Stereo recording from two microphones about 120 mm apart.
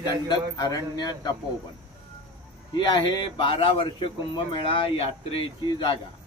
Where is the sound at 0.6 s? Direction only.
35° left (ahead or behind).